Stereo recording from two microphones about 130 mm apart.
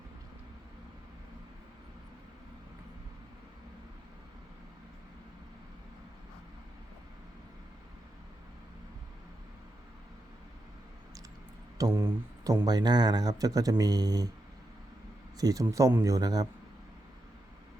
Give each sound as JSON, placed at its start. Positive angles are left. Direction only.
{"t": 11.8, "sound": "speech", "side_deg": -20}
{"t": 12.6, "sound": "speech", "side_deg": -30}
{"t": 15.4, "sound": "speech", "side_deg": -25}